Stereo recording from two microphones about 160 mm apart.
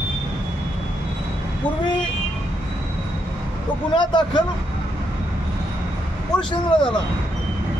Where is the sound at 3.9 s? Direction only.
30° left (ahead or behind).